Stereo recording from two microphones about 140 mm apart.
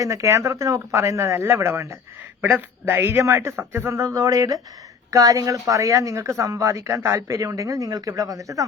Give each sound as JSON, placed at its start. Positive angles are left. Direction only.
{"t": 0.0, "sound": "a man's voice", "side_deg": -25}